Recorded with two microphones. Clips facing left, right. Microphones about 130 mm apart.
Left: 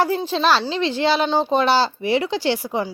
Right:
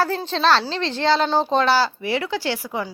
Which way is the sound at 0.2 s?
10° left (ahead or behind).